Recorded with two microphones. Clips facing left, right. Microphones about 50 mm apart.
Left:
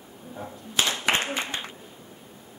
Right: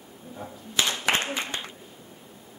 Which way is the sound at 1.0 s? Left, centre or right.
Left.